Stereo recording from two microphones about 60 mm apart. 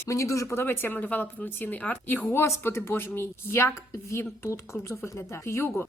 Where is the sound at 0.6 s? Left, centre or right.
Left.